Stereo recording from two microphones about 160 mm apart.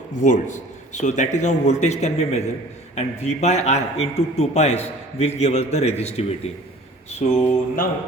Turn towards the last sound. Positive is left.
turn(degrees=55)  # may be behind; listen again after turning